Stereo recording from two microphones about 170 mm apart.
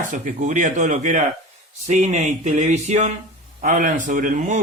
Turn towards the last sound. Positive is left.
turn(degrees=-50)  # may be behind; listen again after turning